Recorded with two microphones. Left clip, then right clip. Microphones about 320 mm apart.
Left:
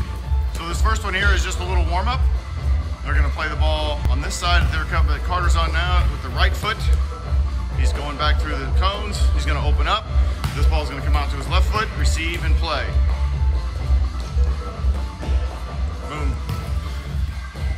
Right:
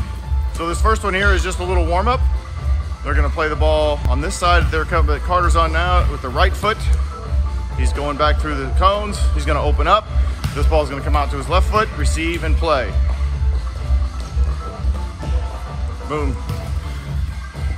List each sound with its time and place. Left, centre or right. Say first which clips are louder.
0.6 s speech: right 6 dB; centre
7.9 s speech: right 6 dB; centre